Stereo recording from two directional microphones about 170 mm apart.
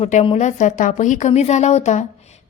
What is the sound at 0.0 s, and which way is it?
A woman's voice, 40° left (ahead or behind).